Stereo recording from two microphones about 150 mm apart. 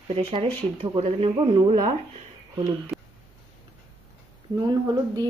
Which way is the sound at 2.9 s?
Centre (ahead or behind).